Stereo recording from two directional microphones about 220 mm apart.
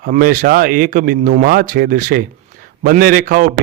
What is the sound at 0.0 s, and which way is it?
Speech, 40° right (ahead or behind).